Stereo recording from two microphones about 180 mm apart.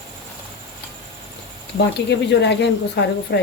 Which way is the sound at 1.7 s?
70° left (ahead or behind).